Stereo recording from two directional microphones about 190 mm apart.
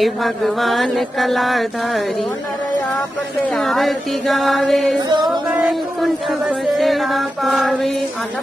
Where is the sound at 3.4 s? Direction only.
Centre (ahead or behind).